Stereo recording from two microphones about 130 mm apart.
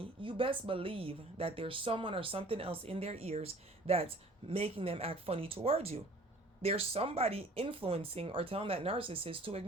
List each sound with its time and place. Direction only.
0.0 s speech: 40° right (ahead or behind)